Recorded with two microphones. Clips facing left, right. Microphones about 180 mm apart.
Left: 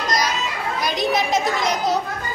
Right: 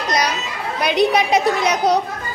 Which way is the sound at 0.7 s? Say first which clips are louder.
Right 6 dB; 65° right (ahead or behind).